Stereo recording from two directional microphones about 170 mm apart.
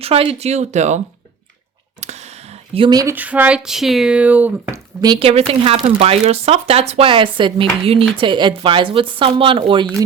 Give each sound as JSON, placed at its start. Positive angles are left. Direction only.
{"t": 0.0, "sound": "speech", "side_deg": -35}
{"t": 2.0, "sound": "a sound", "side_deg": -40}
{"t": 3.2, "sound": "speech", "side_deg": -10}
{"t": 4.9, "sound": "speech", "side_deg": -25}